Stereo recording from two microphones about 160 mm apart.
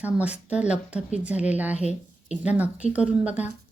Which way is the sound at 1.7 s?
45° left (ahead or behind).